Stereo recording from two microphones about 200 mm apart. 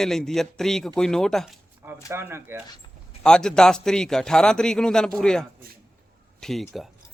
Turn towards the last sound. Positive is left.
turn(degrees=0)  # may be behind; listen again after turning